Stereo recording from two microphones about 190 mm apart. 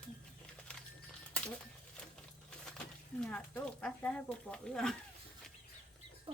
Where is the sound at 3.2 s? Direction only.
5° left (ahead or behind).